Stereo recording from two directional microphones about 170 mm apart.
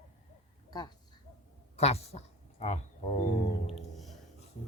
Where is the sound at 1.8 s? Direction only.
40° left (ahead or behind).